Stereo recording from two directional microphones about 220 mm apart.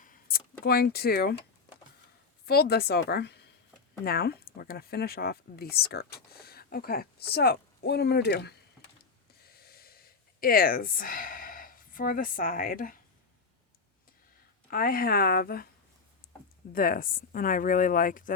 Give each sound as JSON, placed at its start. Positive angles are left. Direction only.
{"t": 0.0, "sound": "a sound", "side_deg": 40}
{"t": 0.6, "sound": "speech", "side_deg": 45}
{"t": 2.5, "sound": "speech", "side_deg": 45}
{"t": 9.4, "sound": "gasp", "side_deg": 45}
{"t": 14.7, "sound": "speech", "side_deg": 40}
{"t": 16.2, "sound": "a sound", "side_deg": 40}
{"t": 16.7, "sound": "speech", "side_deg": 40}